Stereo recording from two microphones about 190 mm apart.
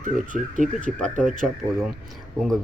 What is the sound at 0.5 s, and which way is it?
Speech, 40° right (ahead or behind).